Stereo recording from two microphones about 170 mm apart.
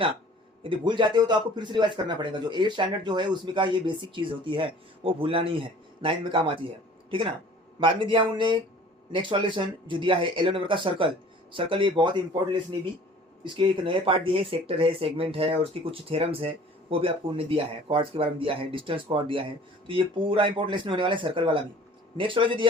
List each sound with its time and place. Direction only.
0.6 s speech: 30° right (ahead or behind)